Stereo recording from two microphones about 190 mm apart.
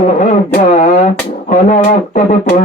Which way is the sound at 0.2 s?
40° left (ahead or behind).